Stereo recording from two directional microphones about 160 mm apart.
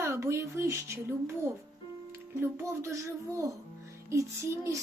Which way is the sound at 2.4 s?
15° right (ahead or behind).